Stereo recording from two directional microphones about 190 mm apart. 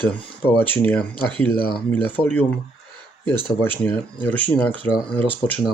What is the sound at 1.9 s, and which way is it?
Speech, 10° left (ahead or behind).